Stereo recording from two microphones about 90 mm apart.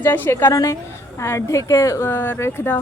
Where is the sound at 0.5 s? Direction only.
40° left (ahead or behind).